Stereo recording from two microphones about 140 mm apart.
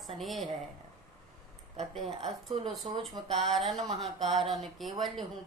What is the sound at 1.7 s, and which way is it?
Speech, 50° right (ahead or behind).